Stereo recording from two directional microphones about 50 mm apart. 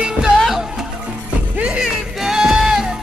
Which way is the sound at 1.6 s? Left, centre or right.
Right.